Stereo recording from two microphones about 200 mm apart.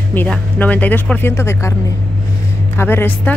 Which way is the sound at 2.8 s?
10° left (ahead or behind).